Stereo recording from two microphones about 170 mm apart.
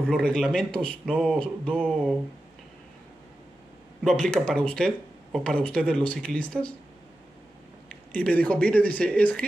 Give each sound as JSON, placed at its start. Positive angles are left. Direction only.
{"t": 0.0, "sound": "speech", "side_deg": 5}
{"t": 4.0, "sound": "speech", "side_deg": 5}
{"t": 8.1, "sound": "speech", "side_deg": 5}